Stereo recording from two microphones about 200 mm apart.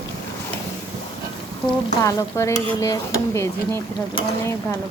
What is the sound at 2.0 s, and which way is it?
Stir, 15° left (ahead or behind).